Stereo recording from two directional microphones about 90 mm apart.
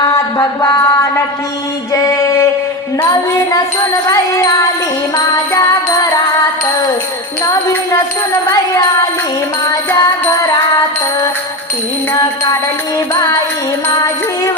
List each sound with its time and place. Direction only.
0.0 s a sound: 40° left (ahead or behind)
4.1 s music: 40° left (ahead or behind)
10.0 s music: 35° left (ahead or behind)
12.1 s music: 30° left (ahead or behind)